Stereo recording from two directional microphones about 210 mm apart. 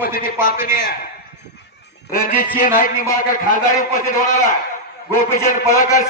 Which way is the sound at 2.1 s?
40° left (ahead or behind).